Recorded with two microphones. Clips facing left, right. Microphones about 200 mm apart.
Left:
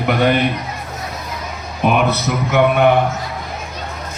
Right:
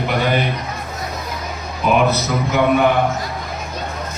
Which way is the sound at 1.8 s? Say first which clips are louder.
Left 1 dB; 60° left (ahead or behind).